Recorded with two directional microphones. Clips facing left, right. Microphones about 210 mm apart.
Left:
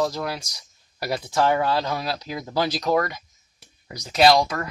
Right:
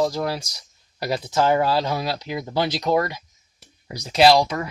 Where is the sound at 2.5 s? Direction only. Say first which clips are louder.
Even; 25° right (ahead or behind).